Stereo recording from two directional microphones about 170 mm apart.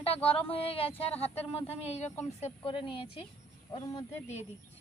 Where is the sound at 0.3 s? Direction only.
35° left (ahead or behind).